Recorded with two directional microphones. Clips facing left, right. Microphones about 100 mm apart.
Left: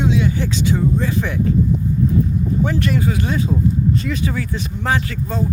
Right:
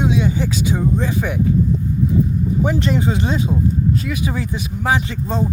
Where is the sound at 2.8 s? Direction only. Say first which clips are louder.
Right 1 dB; 25° right (ahead or behind).